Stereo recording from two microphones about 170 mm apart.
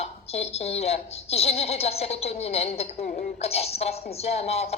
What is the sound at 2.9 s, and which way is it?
Speech, 55° left (ahead or behind).